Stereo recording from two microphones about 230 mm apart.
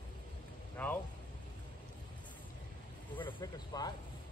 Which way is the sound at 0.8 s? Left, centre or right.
Centre.